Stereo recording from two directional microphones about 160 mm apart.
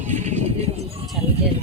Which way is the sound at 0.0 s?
45° right (ahead or behind).